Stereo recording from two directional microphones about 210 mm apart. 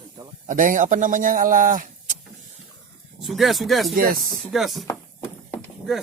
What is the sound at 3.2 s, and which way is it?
Speech, centre (ahead or behind).